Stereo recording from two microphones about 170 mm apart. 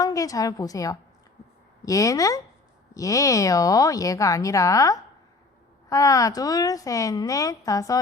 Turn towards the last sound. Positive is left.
turn(degrees=20)  # may be behind; listen again after turning